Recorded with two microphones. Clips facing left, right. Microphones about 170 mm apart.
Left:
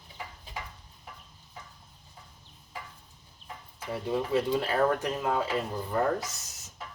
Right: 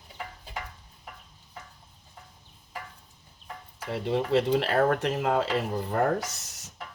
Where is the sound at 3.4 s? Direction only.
70° right (ahead or behind); by 6.3 s 50° right (ahead or behind).